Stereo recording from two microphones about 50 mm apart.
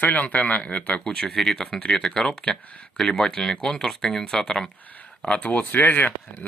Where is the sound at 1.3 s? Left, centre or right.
Centre.